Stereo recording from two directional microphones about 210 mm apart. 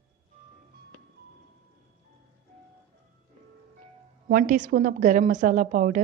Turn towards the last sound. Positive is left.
turn(degrees=-40)  # may be behind; listen again after turning